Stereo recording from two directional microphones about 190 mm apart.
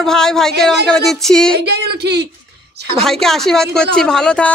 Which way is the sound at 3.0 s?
Centre (ahead or behind).